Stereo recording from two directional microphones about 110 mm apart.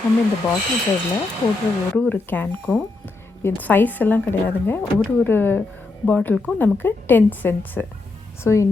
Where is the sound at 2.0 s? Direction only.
15° left (ahead or behind).